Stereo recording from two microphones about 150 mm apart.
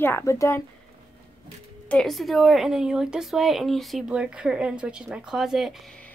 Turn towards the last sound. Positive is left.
turn(degrees=0)  # may be behind; listen again after turning